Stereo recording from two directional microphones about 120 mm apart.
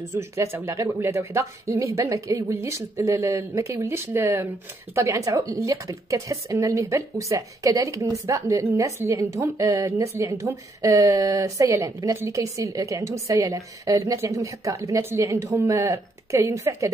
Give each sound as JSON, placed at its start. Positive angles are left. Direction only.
{"t": 0.1, "sound": "a woman's voice", "side_deg": -20}